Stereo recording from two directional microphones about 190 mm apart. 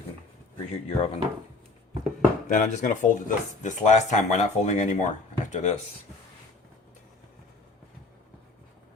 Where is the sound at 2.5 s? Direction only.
40° left (ahead or behind).